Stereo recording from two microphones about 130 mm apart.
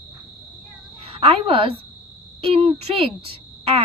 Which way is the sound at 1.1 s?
45° right (ahead or behind).